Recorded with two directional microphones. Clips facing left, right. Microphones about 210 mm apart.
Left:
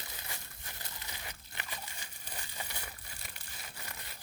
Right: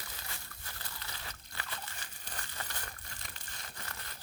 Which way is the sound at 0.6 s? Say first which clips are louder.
Even; 20° left (ahead or behind).